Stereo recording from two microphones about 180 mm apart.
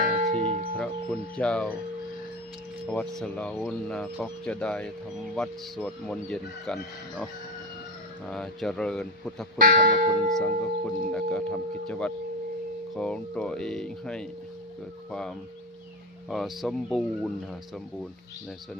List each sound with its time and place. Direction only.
0.2 s music: 35° right (ahead or behind)
0.8 s music: 5° left (ahead or behind)
2.9 s speech: 5° left (ahead or behind)
8.3 s speech: centre (ahead or behind)
9.6 s speech: 55° right (ahead or behind)
10.2 s speech: centre (ahead or behind)